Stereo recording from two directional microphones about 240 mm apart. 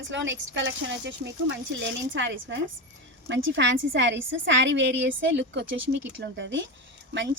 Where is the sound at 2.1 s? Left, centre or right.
Right.